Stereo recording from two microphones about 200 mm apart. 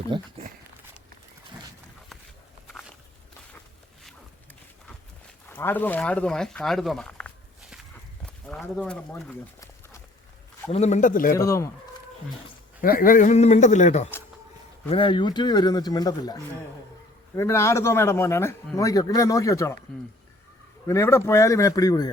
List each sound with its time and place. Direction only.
0.1 s speech: 20° right (ahead or behind)
5.5 s speech: 10° left (ahead or behind)
10.7 s a man's voice: 35° left (ahead or behind)
11.3 s a man's voice: 15° left (ahead or behind)
12.8 s a man's voice: 45° left (ahead or behind); by 19.8 s 15° left (ahead or behind)
20.8 s a man's voice: 15° left (ahead or behind)